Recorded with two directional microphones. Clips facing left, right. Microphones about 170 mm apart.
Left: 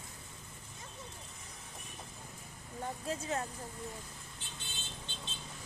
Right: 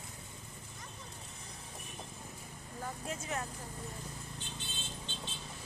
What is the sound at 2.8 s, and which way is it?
Speech, 30° left (ahead or behind).